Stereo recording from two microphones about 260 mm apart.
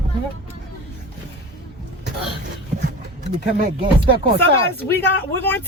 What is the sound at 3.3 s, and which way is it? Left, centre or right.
Speech, right.